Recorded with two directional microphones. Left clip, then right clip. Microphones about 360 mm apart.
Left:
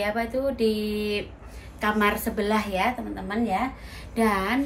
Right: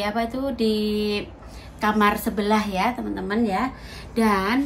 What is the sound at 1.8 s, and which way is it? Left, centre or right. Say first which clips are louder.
A woman's voice: right 3 dB; centre.